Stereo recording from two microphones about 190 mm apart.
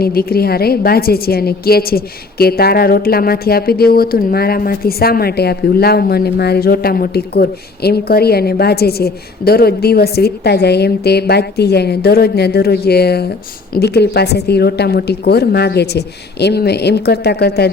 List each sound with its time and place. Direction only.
0.0 s a woman's voice: 55° left (ahead or behind)